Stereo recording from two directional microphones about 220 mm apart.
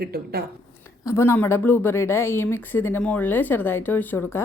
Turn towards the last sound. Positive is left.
turn(degrees=10)  # may be behind; listen again after turning